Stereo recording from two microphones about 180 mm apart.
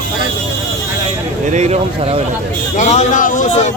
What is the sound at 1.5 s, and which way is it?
Speech, 40° right (ahead or behind).